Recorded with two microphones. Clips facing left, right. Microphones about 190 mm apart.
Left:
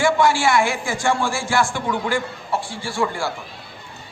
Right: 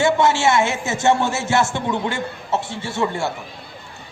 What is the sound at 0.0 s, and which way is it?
A man's voice, 25° right (ahead or behind).